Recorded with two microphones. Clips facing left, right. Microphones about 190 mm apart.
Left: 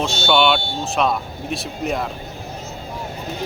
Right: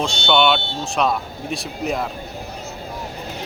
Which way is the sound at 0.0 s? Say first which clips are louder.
Even; 5° left (ahead or behind).